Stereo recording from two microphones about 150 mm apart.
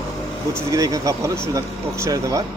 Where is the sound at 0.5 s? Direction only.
20° right (ahead or behind).